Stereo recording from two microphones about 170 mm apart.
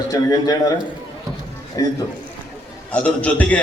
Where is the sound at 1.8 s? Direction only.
20° left (ahead or behind).